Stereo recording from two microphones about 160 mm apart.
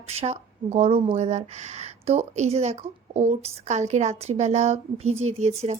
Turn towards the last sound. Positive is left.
turn(degrees=-45)  # may be behind; listen again after turning